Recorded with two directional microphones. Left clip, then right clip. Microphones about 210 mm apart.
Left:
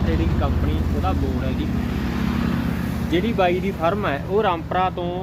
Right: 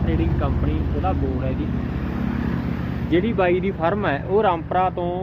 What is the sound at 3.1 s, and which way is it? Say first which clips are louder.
Speech: right 1 dB; 30° right (ahead or behind).